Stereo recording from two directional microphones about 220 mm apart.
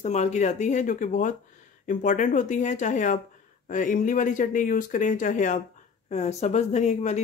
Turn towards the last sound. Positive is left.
turn(degrees=30)  # may be behind; listen again after turning